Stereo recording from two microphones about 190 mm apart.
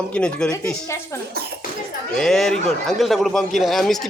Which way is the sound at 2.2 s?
Centre (ahead or behind).